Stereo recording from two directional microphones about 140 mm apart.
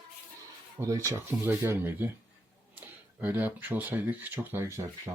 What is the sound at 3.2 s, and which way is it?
Speech, 15° right (ahead or behind).